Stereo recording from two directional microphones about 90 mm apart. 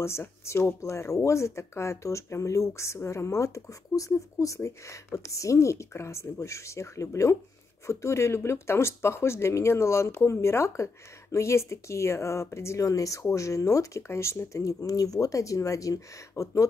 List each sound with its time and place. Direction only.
0.0 s speech: 30° left (ahead or behind)